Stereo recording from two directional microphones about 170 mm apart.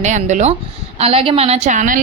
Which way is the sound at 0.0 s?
45° right (ahead or behind).